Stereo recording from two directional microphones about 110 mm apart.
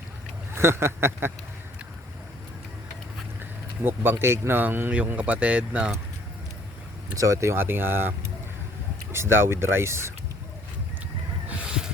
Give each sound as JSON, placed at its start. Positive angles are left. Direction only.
{"t": 0.5, "sound": "speech", "side_deg": -25}
{"t": 3.8, "sound": "speech", "side_deg": -20}
{"t": 7.2, "sound": "speech", "side_deg": -30}
{"t": 9.1, "sound": "speech", "side_deg": -25}
{"t": 11.4, "sound": "a sound", "side_deg": -10}